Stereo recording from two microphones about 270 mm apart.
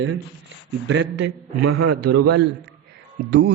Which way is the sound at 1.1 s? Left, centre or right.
Right.